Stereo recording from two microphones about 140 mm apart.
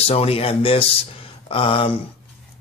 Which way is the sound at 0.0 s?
45° left (ahead or behind).